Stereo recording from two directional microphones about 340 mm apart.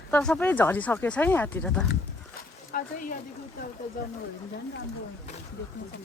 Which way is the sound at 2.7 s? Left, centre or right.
Left.